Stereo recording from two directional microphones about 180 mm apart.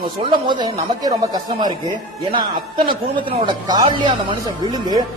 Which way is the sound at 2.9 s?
25° right (ahead or behind).